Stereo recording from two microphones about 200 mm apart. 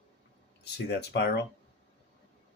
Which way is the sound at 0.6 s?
55° left (ahead or behind).